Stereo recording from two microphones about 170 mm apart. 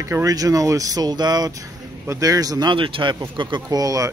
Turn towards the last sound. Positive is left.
turn(degrees=-20)  # may be behind; listen again after turning